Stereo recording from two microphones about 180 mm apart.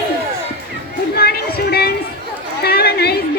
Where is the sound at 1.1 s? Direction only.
60° left (ahead or behind).